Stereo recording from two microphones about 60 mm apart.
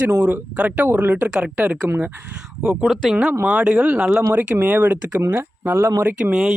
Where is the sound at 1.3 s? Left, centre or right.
Centre.